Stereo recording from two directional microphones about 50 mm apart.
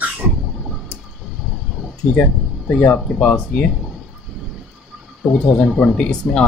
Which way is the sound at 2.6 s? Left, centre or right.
Left.